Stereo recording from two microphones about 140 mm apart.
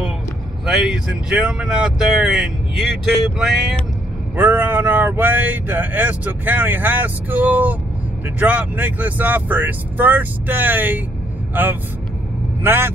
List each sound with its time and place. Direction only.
0.7 s speech: 5° right (ahead or behind)
4.4 s speech: 15° right (ahead or behind)